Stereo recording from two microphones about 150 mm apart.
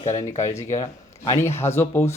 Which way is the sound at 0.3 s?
20° left (ahead or behind).